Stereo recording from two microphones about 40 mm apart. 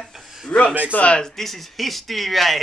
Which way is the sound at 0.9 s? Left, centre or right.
Left.